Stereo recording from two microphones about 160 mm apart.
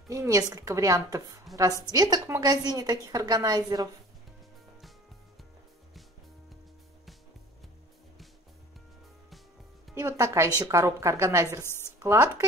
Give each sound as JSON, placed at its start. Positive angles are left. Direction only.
{"t": 0.1, "sound": "a woman's voice", "side_deg": -20}
{"t": 9.9, "sound": "a woman's voice", "side_deg": -15}